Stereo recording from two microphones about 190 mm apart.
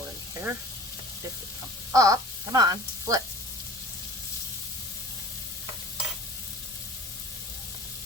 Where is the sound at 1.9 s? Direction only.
20° right (ahead or behind).